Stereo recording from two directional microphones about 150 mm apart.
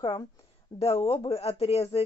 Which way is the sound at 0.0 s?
30° left (ahead or behind).